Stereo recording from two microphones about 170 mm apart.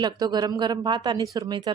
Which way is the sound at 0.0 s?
25° right (ahead or behind).